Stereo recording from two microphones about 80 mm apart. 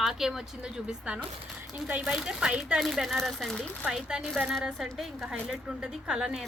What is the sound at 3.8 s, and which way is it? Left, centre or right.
A woman's voice, centre.